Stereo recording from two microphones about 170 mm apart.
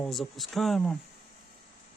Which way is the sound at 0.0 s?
Centre (ahead or behind).